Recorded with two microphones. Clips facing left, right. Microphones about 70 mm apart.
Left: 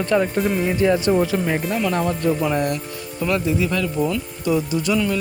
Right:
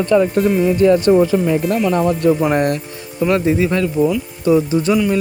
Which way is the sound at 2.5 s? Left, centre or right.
Right.